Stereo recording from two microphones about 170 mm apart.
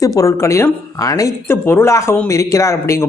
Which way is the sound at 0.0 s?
20° left (ahead or behind).